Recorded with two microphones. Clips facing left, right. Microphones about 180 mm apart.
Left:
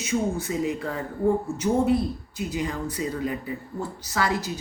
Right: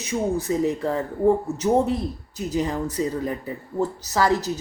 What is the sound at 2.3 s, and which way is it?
Speech, 40° right (ahead or behind).